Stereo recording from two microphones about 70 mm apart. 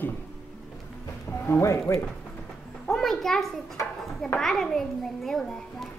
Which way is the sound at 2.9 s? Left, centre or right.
Centre.